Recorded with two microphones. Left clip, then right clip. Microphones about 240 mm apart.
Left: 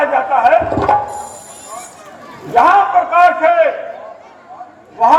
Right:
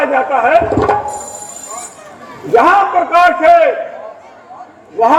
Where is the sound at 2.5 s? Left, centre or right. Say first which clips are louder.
Right 1 dB; right.